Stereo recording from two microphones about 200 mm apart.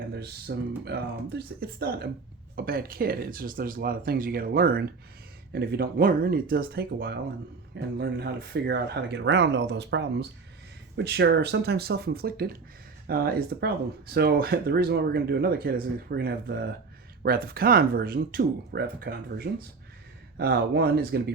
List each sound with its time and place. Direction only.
0.1 s speech: 55° right (ahead or behind)